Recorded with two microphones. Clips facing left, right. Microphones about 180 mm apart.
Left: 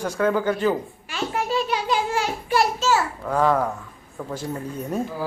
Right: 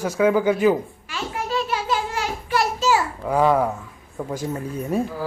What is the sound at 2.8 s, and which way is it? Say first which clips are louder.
Babbling: right 1 dB; 10° right (ahead or behind).